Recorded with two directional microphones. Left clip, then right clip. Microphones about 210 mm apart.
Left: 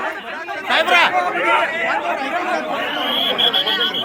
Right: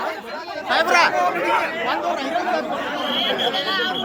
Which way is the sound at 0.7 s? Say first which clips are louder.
Left 2 dB; 40° left (ahead or behind).